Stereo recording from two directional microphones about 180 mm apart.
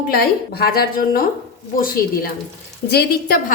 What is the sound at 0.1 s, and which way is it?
A woman's voice, 60° left (ahead or behind).